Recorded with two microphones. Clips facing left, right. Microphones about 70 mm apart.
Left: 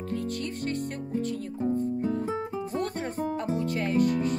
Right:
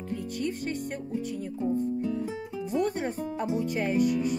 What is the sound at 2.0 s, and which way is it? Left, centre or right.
Music, left.